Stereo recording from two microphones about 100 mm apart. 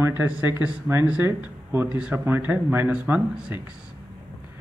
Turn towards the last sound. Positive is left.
turn(degrees=-10)  # may be behind; listen again after turning